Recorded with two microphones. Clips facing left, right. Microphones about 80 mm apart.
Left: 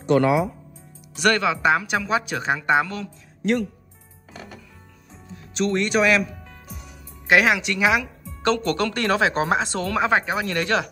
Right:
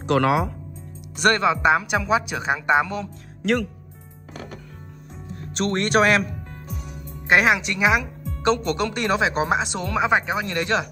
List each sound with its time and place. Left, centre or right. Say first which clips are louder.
0.0 s speech: left 1 dB; right
1.2 s speech: right 1 dB; right
1.9 s a woman's voice: right 2 dB; centre
5.3 s speech: left 1 dB; right
7.2 s speech: even; right